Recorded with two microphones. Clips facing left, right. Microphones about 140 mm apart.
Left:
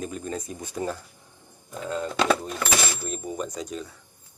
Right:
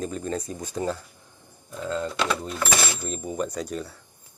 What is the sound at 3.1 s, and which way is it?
Speech, centre (ahead or behind).